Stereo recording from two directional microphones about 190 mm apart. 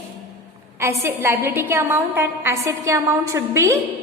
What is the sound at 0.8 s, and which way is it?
A woman's voice, 15° right (ahead or behind).